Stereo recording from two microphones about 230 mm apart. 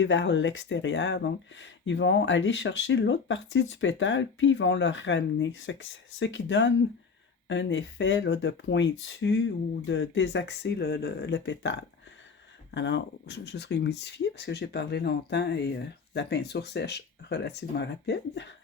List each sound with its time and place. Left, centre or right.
0.0 s speech: left